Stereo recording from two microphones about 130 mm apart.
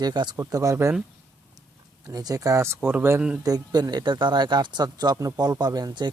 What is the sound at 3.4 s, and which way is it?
Speech, 30° right (ahead or behind).